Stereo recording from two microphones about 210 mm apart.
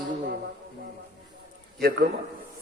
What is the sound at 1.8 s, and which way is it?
Speech, 45° right (ahead or behind).